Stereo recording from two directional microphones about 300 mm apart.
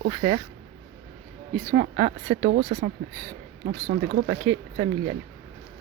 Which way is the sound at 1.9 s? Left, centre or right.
Centre.